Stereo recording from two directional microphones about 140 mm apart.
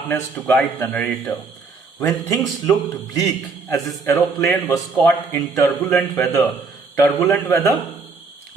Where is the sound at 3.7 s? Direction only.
20° left (ahead or behind).